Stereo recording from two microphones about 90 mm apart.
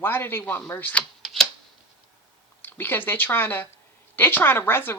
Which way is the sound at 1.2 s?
Centre (ahead or behind).